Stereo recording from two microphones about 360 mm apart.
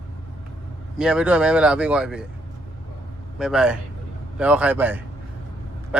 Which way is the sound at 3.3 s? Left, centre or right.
Centre.